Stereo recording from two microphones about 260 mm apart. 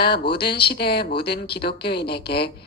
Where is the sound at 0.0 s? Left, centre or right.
Left.